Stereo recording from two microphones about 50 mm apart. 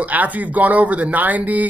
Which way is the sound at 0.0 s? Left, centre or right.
Right.